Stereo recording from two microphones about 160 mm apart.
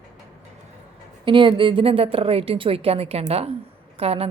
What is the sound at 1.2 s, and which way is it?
A woman's voice, 30° right (ahead or behind).